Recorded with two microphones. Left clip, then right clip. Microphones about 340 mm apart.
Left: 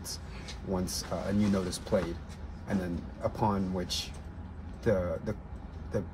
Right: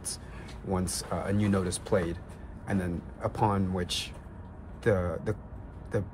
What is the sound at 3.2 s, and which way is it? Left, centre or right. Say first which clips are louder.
Speech: right 2 dB; right.